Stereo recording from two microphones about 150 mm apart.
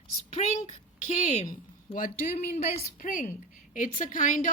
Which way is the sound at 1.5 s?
65° left (ahead or behind).